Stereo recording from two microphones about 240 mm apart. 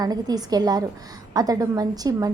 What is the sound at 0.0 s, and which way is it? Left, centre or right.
A woman's voice, centre.